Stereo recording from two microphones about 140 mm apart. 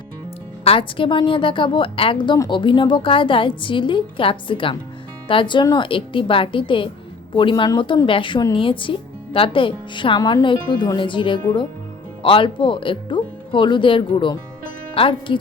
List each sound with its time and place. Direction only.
0.6 s speech: 40° left (ahead or behind)